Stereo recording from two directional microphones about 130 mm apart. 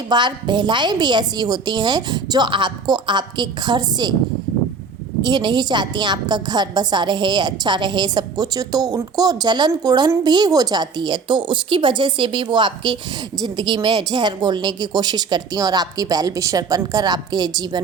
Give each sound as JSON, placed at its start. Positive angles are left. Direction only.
{"t": 0.1, "sound": "a woman's voice", "side_deg": -35}
{"t": 5.2, "sound": "a woman's voice", "side_deg": -35}